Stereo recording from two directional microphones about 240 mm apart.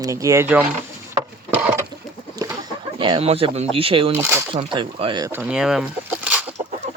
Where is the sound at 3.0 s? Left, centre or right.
Right.